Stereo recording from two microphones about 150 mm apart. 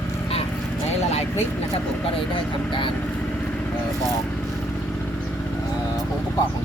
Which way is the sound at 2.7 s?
35° left (ahead or behind).